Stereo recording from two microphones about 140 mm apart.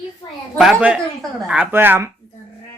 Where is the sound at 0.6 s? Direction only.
5° right (ahead or behind).